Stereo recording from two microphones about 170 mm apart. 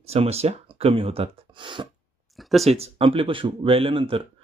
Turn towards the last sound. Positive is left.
turn(degrees=-30)  # may be behind; listen again after turning